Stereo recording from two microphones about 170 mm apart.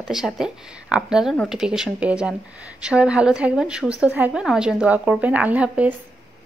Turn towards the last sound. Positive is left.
turn(degrees=-10)  # may be behind; listen again after turning